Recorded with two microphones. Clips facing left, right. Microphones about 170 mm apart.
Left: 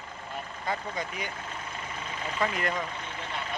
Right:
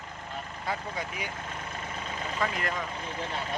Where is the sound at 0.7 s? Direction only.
5° right (ahead or behind).